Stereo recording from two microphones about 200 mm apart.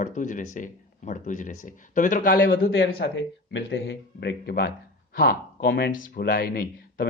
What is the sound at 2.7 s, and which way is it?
Speech, 65° left (ahead or behind).